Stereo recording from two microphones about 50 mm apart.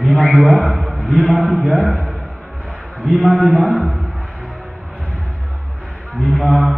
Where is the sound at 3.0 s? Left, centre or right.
Centre.